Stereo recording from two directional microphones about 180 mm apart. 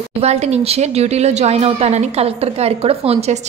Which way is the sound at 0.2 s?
35° right (ahead or behind).